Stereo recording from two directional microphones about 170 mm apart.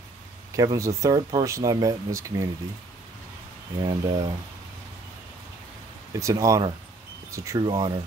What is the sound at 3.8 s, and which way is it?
Speech, 20° right (ahead or behind).